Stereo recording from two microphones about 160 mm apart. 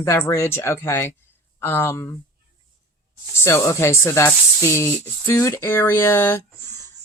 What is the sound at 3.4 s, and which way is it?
Speech, 15° left (ahead or behind).